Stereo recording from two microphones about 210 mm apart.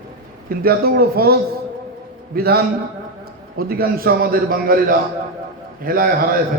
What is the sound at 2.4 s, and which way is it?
A man's voice, 50° right (ahead or behind).